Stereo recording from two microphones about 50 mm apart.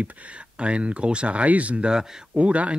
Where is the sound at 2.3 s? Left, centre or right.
Right.